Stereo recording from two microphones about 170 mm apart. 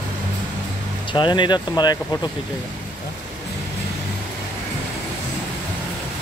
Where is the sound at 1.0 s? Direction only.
30° left (ahead or behind).